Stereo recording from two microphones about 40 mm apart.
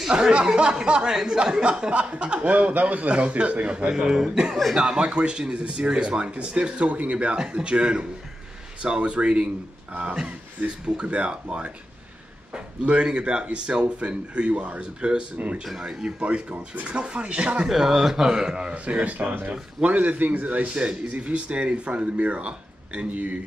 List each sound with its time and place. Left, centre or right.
0.1 s speech: right
2.5 s a man's voice: right
3.9 s a man's voice: centre
10.6 s a man's voice: right
15.3 s a man's voice: right
15.6 s a man's voice: centre
16.2 s a man's voice: right
17.6 s a man's voice: centre
18.9 s a man's voice: right